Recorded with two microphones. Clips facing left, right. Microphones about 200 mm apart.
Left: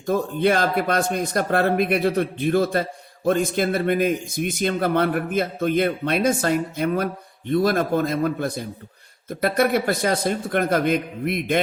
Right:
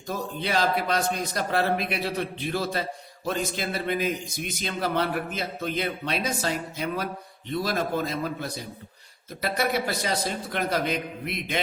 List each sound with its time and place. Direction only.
0.0 s a man's voice: 55° left (ahead or behind)